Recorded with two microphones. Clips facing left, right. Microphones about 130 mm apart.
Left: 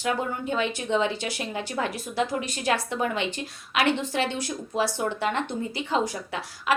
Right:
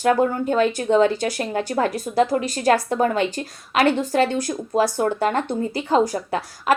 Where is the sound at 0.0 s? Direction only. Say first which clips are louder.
Right 9 dB; 45° right (ahead or behind).